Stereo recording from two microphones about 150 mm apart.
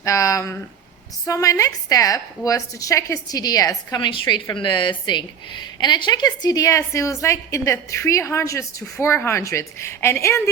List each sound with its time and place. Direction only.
0.0 s a woman's voice: 20° left (ahead or behind)